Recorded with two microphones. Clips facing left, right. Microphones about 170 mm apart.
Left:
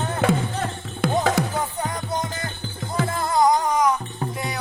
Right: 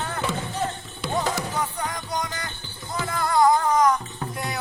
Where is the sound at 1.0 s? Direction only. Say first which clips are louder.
Left 6 dB; 55° left (ahead or behind).